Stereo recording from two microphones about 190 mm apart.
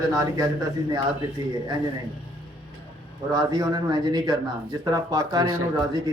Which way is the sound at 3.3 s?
20° right (ahead or behind).